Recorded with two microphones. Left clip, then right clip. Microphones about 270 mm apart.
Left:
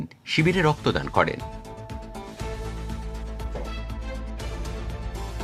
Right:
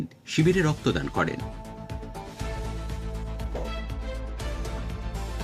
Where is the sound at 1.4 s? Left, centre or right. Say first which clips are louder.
Left 2 dB; centre.